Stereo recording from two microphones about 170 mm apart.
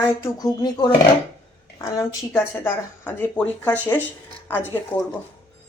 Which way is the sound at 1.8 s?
20° left (ahead or behind).